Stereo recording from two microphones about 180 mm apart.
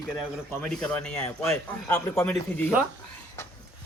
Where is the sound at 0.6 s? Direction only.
5° left (ahead or behind).